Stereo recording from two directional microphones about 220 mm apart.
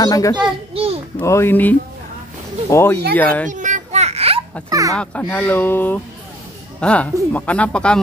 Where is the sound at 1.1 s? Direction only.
10° left (ahead or behind).